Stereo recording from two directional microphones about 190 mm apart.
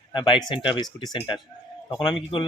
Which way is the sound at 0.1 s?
25° left (ahead or behind).